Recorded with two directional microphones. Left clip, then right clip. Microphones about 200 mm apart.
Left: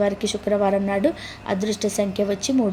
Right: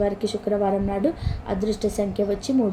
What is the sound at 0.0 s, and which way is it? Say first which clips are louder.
A woman's voice: left 2 dB; 20° left (ahead or behind).